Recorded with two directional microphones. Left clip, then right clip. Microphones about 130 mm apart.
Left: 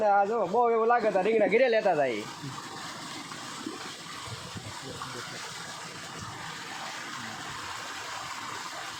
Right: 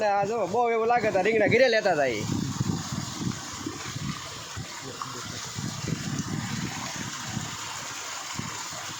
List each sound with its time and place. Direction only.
0.0 s speech: 35° right (ahead or behind); by 2.1 s 55° right (ahead or behind)